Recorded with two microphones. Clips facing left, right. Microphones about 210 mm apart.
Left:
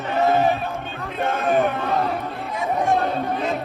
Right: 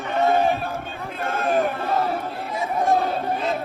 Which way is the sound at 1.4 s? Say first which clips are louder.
Left 1 dB; centre (ahead or behind).